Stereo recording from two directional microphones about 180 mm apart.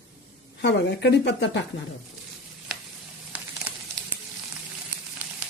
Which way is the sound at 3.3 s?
10° right (ahead or behind).